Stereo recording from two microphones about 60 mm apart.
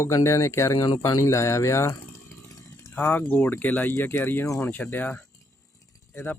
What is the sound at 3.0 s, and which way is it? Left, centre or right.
Speech, left.